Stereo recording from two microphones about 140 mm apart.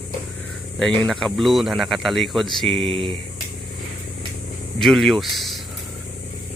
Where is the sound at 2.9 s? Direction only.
40° right (ahead or behind).